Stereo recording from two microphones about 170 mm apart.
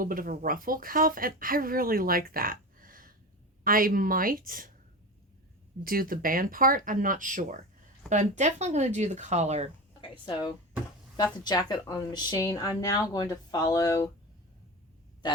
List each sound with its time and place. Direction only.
0.0 s speech: 55° right (ahead or behind)
5.8 s speech: 60° right (ahead or behind); by 9.6 s 40° right (ahead or behind)
10.0 s speech: 30° left (ahead or behind)